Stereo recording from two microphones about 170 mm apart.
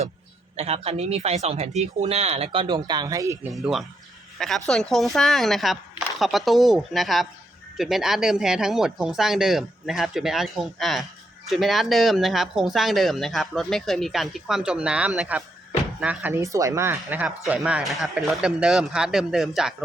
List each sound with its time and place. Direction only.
0.5 s speech: 40° right (ahead or behind); by 3.5 s 20° right (ahead or behind)
3.5 s speech: centre (ahead or behind)